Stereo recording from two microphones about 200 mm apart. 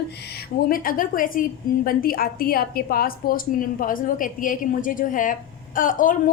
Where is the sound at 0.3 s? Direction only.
45° left (ahead or behind).